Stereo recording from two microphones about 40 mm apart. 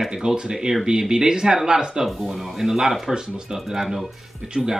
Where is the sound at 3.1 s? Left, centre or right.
Centre.